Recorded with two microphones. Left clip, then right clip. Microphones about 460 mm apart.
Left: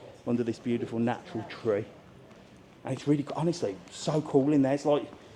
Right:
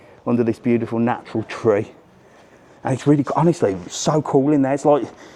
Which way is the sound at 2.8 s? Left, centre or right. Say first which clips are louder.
Right 11 dB; right.